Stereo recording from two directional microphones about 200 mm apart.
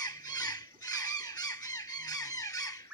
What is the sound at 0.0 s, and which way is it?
Squeak, 20° left (ahead or behind).